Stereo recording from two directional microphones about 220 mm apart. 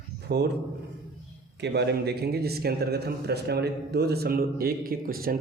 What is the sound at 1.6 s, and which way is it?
Speech, 50° right (ahead or behind).